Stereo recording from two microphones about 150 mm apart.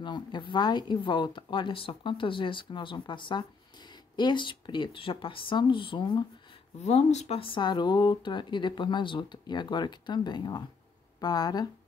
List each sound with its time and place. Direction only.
0.0 s speech: 30° left (ahead or behind)
6.8 s speech: 45° left (ahead or behind); by 11.7 s 25° left (ahead or behind)